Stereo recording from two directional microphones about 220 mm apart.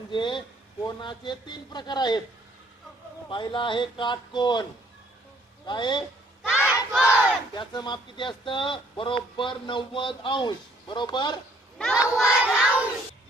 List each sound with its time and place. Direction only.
0.1 s speech: 20° left (ahead or behind)
3.2 s speech: 20° left (ahead or behind)
5.6 s speech: 20° left (ahead or behind)
6.5 s battle cry: 5° right (ahead or behind)
7.0 s battle cry: 10° left (ahead or behind)
7.6 s speech: 20° left (ahead or behind)
11.8 s speech: centre (ahead or behind)
12.4 s child singing: 5° right (ahead or behind)